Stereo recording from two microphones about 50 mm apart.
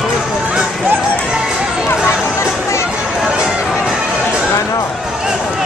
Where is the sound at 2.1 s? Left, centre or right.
Left.